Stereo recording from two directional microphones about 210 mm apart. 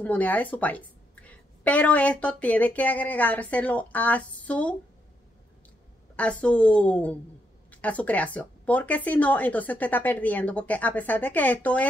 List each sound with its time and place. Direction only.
0.0 s a woman's voice: 10° left (ahead or behind)
6.1 s a woman's voice: 5° left (ahead or behind)